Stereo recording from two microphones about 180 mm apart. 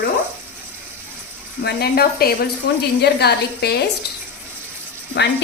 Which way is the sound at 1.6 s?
65° left (ahead or behind).